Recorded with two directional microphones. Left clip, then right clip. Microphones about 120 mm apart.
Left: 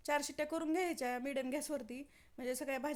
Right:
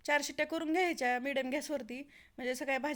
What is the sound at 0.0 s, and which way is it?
Speech, 20° right (ahead or behind).